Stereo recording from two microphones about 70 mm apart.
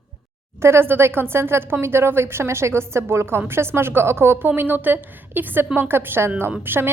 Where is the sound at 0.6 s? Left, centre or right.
Right.